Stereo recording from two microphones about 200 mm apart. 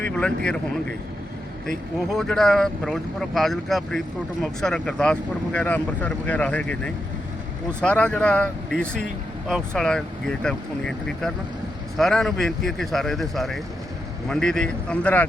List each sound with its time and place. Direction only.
0.1 s speech: 5° left (ahead or behind)
2.0 s speech: centre (ahead or behind)
8.9 s speech: 40° right (ahead or behind)
9.5 s speech: centre (ahead or behind)